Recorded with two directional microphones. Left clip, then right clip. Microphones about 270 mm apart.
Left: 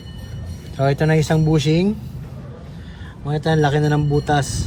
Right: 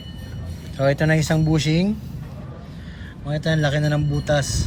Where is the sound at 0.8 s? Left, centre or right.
Left.